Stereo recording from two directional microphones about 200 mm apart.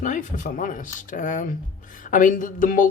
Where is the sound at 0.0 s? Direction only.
40° left (ahead or behind).